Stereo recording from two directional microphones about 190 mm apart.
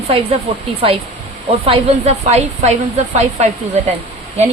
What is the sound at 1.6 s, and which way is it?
Speech, 35° right (ahead or behind).